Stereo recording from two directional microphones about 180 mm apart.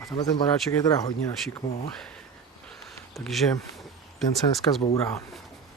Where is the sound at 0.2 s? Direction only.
20° left (ahead or behind).